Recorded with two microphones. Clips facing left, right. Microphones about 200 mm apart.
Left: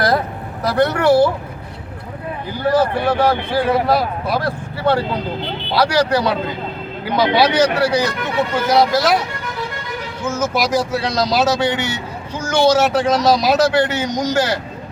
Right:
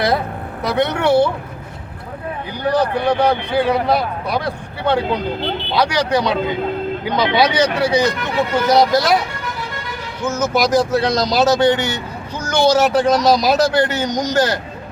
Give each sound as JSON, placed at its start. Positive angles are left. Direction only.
{"t": 0.6, "sound": "speech", "side_deg": 0}
{"t": 2.6, "sound": "speech", "side_deg": 5}
{"t": 10.2, "sound": "speech", "side_deg": 10}